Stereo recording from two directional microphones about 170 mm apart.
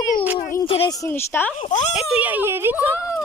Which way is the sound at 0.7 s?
30° left (ahead or behind).